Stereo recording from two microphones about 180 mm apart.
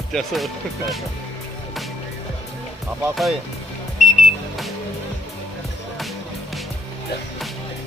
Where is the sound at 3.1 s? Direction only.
Centre (ahead or behind).